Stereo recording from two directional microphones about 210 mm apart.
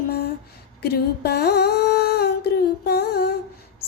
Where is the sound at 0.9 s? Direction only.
50° left (ahead or behind).